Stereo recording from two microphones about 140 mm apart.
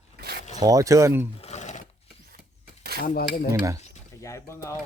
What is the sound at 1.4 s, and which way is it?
Roar, 55° left (ahead or behind).